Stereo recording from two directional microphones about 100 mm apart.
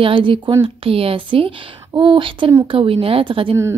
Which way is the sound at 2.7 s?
65° right (ahead or behind).